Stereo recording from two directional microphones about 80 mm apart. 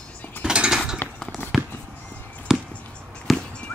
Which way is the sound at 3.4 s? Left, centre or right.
Centre.